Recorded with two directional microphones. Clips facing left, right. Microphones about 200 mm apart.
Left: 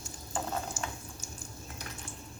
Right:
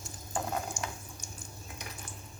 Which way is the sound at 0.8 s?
5° left (ahead or behind).